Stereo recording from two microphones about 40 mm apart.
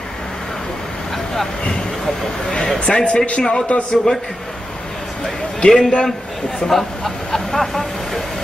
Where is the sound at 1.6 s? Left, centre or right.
Left.